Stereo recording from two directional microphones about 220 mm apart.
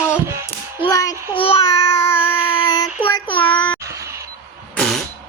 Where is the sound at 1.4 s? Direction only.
25° left (ahead or behind).